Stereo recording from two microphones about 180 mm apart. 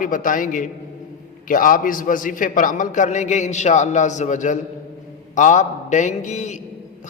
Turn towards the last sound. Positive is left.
turn(degrees=40)  # may be behind; listen again after turning